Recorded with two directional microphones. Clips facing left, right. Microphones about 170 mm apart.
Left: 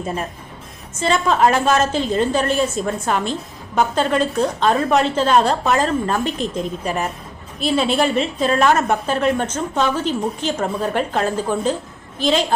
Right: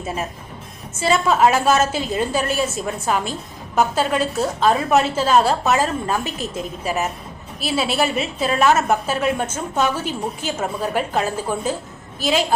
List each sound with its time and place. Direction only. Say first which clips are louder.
0.9 s a woman's voice: even; 5° right (ahead or behind)